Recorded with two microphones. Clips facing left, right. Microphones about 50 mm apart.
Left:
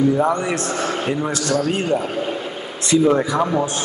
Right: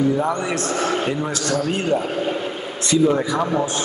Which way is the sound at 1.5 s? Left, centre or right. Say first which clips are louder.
Left 1 dB; centre.